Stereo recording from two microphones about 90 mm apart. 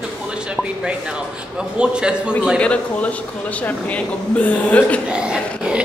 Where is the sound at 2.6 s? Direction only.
15° left (ahead or behind).